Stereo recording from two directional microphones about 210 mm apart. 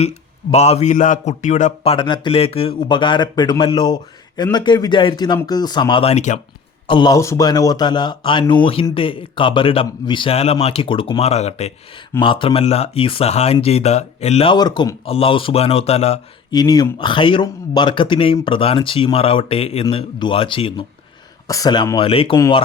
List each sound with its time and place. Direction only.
0.5 s speech: 30° left (ahead or behind)
6.8 s speech: 20° left (ahead or behind)